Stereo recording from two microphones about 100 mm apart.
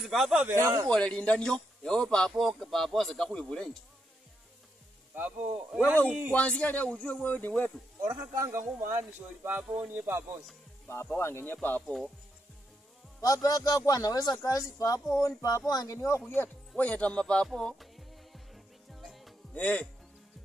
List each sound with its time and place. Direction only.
0.0 s a man's voice: centre (ahead or behind)
0.5 s speech: 25° right (ahead or behind)
0.8 s a man's voice: 10° left (ahead or behind)
5.1 s speech: 20° right (ahead or behind)
6.3 s a man's voice: 15° left (ahead or behind)
8.4 s speech: 25° right (ahead or behind)
10.0 s speech: 25° right (ahead or behind)
10.9 s a man's voice: 25° left (ahead or behind)
13.2 s a man's voice: 35° left (ahead or behind)
16.3 s music: 20° left (ahead or behind); by 19.3 s centre (ahead or behind)
19.5 s a man's voice: 15° left (ahead or behind)